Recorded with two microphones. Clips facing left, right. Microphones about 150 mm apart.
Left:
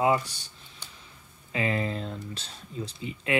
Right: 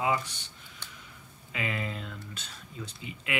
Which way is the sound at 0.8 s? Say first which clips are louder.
Even; 15° left (ahead or behind).